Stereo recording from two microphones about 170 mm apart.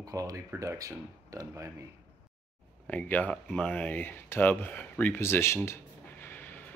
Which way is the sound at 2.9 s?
10° left (ahead or behind).